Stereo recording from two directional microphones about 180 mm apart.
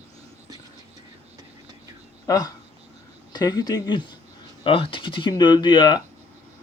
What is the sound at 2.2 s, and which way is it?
Speech, 20° left (ahead or behind).